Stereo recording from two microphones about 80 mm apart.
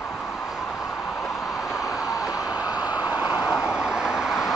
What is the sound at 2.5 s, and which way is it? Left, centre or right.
Vehicle, centre.